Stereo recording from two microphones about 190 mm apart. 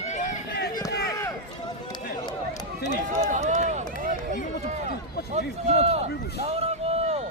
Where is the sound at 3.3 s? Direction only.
40° right (ahead or behind).